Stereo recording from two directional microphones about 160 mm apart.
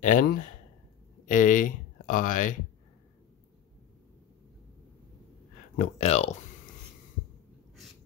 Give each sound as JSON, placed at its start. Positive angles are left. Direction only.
{"t": 0.0, "sound": "speech", "side_deg": 55}
{"t": 5.8, "sound": "speech", "side_deg": 40}